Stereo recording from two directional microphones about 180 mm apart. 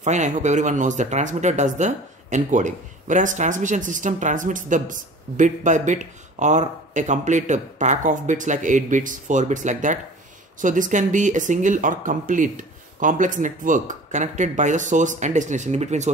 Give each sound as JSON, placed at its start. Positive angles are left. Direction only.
{"t": 0.0, "sound": "speech", "side_deg": -40}